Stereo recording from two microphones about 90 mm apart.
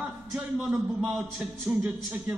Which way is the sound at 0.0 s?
5° right (ahead or behind).